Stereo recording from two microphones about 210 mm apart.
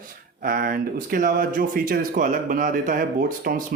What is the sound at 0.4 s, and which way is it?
Speech, 45° right (ahead or behind).